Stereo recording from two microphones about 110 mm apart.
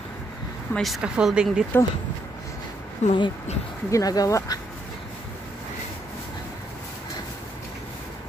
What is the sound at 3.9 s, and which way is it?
Speech, 30° left (ahead or behind).